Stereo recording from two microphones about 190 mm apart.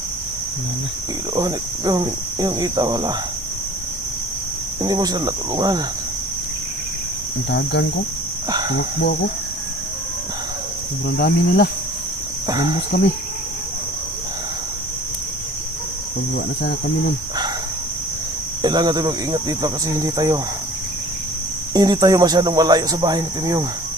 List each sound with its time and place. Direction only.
1.4 s speech: 20° right (ahead or behind)
4.8 s speech: 20° right (ahead or behind)
7.5 s cricket: 65° left (ahead or behind)
8.4 s cricket: 20° right (ahead or behind)
11.2 s cricket: 60° left (ahead or behind)
12.5 s speech: 20° right (ahead or behind)
12.9 s cricket: 55° left (ahead or behind)
16.3 s cricket: 55° left (ahead or behind)
18.6 s speech: 20° right (ahead or behind)
21.7 s speech: 20° right (ahead or behind)